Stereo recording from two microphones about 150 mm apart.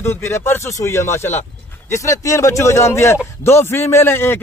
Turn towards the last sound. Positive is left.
turn(degrees=15)  # may be behind; listen again after turning